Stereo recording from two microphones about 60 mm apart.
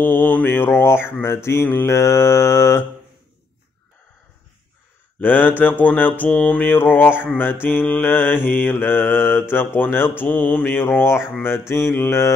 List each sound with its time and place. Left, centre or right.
0.0 s mantra: left
5.2 s mantra: left